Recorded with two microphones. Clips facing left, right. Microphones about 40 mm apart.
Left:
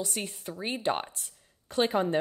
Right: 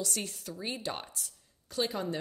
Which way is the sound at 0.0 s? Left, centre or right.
Left.